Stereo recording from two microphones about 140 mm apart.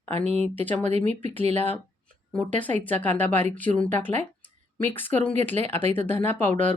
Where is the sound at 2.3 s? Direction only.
10° left (ahead or behind).